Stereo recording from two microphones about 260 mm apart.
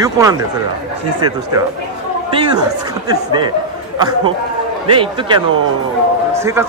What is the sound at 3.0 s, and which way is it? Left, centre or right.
Speech, centre.